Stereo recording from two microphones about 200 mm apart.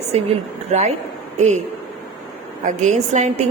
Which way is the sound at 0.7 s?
35° right (ahead or behind).